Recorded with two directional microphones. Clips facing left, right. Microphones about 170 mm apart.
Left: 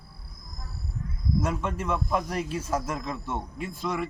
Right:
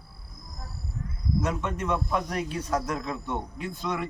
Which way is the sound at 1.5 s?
5° left (ahead or behind).